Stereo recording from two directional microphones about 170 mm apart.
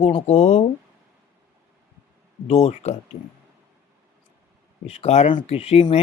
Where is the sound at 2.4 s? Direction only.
40° left (ahead or behind).